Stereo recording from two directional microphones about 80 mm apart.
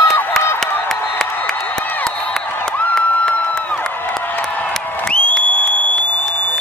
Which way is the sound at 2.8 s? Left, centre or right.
Centre.